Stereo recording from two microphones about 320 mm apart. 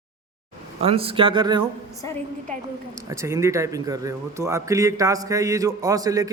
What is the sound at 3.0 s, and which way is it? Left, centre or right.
Speech, centre.